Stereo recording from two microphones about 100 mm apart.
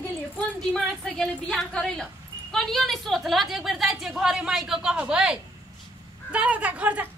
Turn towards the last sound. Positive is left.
turn(degrees=-15)  # may be behind; listen again after turning